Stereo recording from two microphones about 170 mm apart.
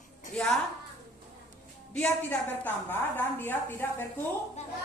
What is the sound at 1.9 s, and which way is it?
A woman's voice, 10° left (ahead or behind).